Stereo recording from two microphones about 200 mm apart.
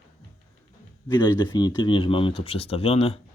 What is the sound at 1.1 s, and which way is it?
Speech, 20° left (ahead or behind).